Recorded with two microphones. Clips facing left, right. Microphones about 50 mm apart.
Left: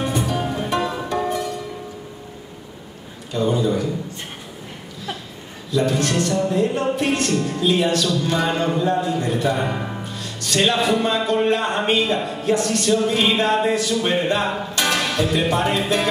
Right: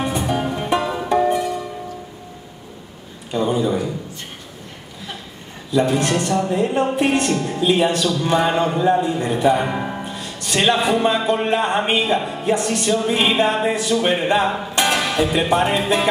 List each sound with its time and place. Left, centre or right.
0.0 s music: centre
0.6 s music: centre
3.3 s a sound: centre
5.7 s music: centre
6.6 s a man's voice: right
7.3 s music: centre
7.6 s a man's voice: centre
13.0 s music: centre